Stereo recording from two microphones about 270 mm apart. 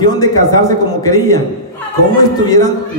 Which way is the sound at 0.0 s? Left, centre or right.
Centre.